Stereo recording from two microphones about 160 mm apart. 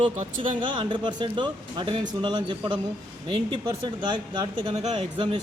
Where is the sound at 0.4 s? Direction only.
30° right (ahead or behind).